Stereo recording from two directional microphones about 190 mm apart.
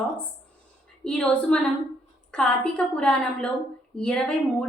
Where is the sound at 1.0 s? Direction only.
5° left (ahead or behind).